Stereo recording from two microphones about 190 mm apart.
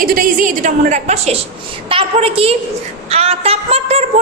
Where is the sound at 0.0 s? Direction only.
45° right (ahead or behind).